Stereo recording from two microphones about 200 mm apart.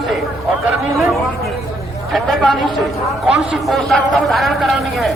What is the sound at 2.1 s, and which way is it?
A man's voice, centre (ahead or behind).